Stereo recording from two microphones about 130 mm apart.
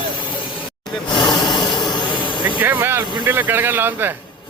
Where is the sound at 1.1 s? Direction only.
35° left (ahead or behind).